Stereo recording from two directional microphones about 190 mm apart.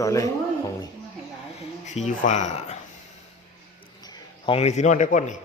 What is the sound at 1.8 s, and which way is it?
Speech, 40° left (ahead or behind).